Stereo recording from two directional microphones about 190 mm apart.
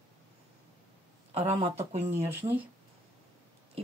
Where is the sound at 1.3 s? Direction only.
35° right (ahead or behind).